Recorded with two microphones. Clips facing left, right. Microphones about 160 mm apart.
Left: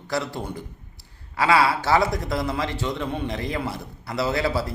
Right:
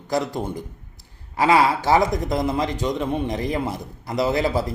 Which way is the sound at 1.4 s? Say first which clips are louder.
Right 2 dB; 15° right (ahead or behind).